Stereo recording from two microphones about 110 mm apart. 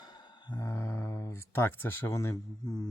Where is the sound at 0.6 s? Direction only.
25° left (ahead or behind).